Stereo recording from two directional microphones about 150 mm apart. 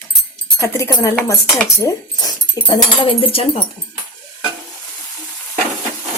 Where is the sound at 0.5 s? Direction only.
20° left (ahead or behind).